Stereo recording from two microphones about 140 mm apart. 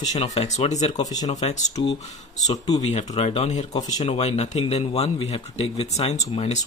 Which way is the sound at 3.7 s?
25° left (ahead or behind).